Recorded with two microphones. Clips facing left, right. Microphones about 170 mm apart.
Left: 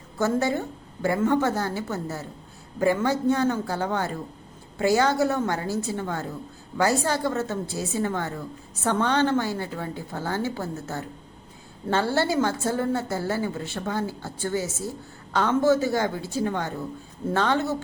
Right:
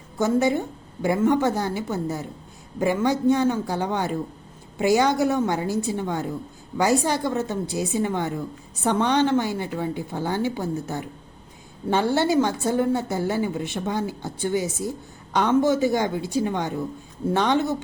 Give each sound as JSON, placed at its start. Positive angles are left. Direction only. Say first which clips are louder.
{"t": 0.2, "sound": "a woman's voice", "louder": "right 3 dB", "side_deg": -15}